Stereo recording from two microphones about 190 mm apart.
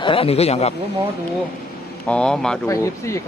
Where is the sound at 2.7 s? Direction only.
15° left (ahead or behind).